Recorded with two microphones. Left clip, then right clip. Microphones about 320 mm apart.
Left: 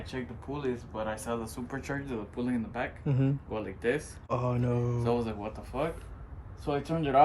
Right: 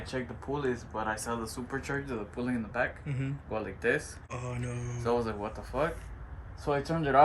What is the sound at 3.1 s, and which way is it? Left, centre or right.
Speech, centre.